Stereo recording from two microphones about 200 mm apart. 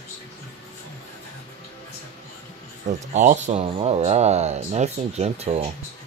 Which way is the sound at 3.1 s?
35° right (ahead or behind).